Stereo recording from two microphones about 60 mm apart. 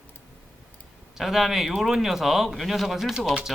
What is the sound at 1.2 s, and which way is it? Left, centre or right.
Speech, centre.